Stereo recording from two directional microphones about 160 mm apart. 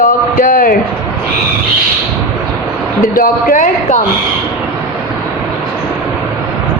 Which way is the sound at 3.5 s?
50° left (ahead or behind).